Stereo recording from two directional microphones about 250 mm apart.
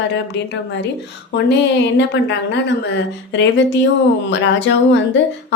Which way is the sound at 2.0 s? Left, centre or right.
Left.